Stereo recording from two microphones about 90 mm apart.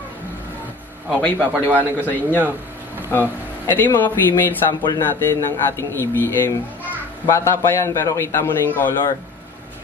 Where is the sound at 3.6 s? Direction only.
20° left (ahead or behind).